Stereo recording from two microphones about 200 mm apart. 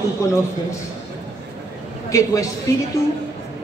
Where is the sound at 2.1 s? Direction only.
15° left (ahead or behind).